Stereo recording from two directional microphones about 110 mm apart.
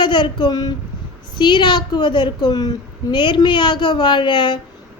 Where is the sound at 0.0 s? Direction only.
45° left (ahead or behind).